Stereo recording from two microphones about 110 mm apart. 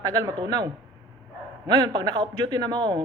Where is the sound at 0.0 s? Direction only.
35° right (ahead or behind).